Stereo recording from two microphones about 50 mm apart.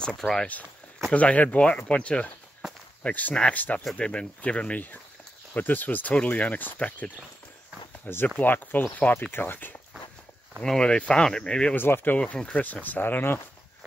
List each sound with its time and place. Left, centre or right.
0.0 s speech: centre
1.1 s speech: left
3.3 s speech: left
5.5 s speech: left
10.8 s speech: left
11.7 s speech: left